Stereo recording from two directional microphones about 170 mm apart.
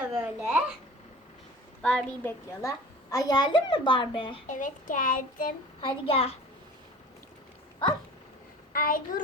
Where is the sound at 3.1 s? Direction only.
25° left (ahead or behind).